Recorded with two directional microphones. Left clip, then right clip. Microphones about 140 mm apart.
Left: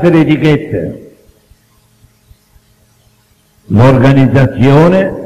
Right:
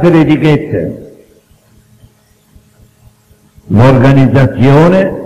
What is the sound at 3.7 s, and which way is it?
A man's voice, 45° left (ahead or behind).